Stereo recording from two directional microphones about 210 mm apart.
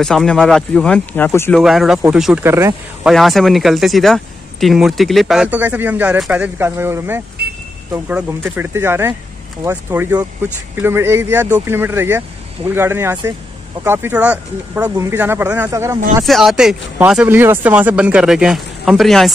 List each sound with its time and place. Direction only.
0.0 s speech: centre (ahead or behind)
1.6 s speech: centre (ahead or behind)
3.1 s speech: centre (ahead or behind)
7.4 s vehicle: 50° right (ahead or behind)
7.9 s speech: 10° right (ahead or behind)
16.3 s speech: centre (ahead or behind)